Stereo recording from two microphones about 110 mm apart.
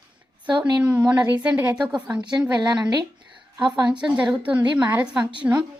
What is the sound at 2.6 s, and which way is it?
Speech, 40° right (ahead or behind).